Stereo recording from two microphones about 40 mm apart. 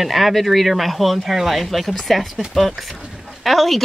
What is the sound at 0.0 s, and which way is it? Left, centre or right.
Speech, centre.